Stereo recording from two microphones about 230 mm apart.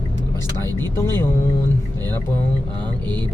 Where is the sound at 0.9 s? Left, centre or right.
Centre.